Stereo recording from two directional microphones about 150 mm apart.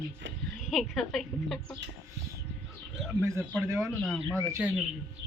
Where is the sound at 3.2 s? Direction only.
15° right (ahead or behind).